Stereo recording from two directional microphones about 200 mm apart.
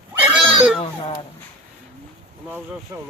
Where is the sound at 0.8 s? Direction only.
20° left (ahead or behind).